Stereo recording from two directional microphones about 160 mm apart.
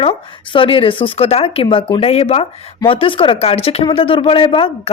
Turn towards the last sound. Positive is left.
turn(degrees=35)  # may be behind; listen again after turning